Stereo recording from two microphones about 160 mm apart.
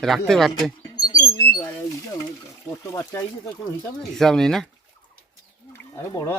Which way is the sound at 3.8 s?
5° left (ahead or behind).